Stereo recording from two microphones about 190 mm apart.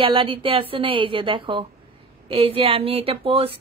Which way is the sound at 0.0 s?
30° right (ahead or behind).